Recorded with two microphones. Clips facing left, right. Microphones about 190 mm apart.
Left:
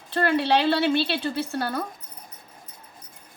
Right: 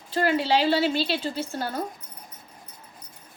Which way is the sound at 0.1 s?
60° left (ahead or behind).